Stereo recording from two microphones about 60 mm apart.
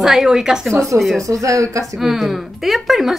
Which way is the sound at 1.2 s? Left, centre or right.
Right.